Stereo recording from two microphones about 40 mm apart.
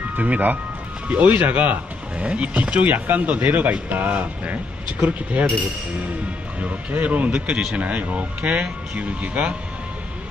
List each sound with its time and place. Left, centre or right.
0.2 s speech: right
1.0 s speech: right
2.1 s speech: right
6.6 s speech: right